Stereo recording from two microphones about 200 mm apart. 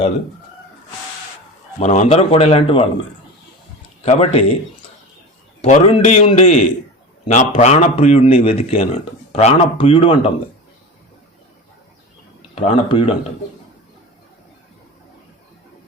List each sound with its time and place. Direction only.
1.8 s speech: 35° left (ahead or behind)
4.0 s a man's voice: 30° left (ahead or behind)
5.6 s a man's voice: 35° left (ahead or behind)
12.5 s speech: 30° left (ahead or behind)